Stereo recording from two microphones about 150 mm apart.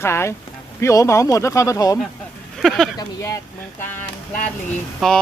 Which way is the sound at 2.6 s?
Centre (ahead or behind).